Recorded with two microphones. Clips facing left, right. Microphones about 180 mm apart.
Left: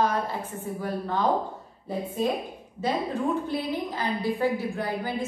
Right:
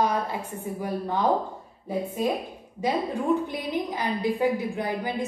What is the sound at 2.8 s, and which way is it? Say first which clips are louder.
A woman's voice: right 1 dB; 15° right (ahead or behind).